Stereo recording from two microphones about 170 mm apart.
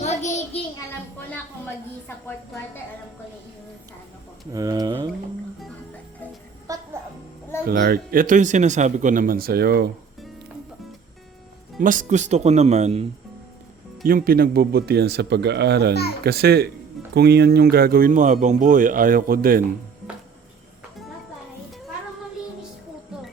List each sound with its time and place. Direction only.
0.0 s a sound: 40° left (ahead or behind)
4.5 s speech: 20° right (ahead or behind)
6.7 s speech: 20° right (ahead or behind)
7.7 s speech: 60° right (ahead or behind)
11.8 s speech: 50° right (ahead or behind)
14.0 s speech: 55° right (ahead or behind)